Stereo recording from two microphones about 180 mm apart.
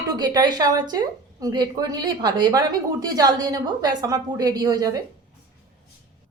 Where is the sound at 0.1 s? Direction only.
20° right (ahead or behind).